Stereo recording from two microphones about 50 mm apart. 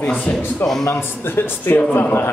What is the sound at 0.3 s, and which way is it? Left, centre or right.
Speech, left.